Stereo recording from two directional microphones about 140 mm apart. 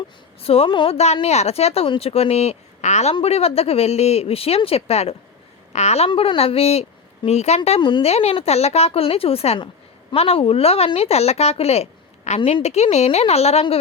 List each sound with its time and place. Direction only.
0.4 s speech: 45° left (ahead or behind)
7.8 s a woman's voice: 35° left (ahead or behind)
8.0 s speech: 45° left (ahead or behind)
12.4 s a woman's voice: 35° left (ahead or behind)
12.6 s speech: 50° left (ahead or behind)